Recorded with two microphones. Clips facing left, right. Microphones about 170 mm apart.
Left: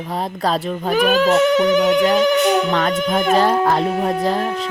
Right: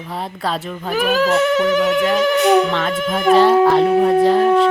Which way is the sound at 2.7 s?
45° left (ahead or behind).